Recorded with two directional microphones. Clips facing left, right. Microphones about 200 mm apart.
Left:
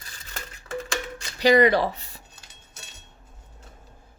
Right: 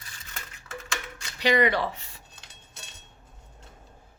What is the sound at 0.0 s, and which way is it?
Typewriter, 35° left (ahead or behind).